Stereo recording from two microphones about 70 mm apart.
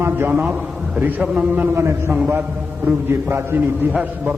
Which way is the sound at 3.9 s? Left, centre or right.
Centre.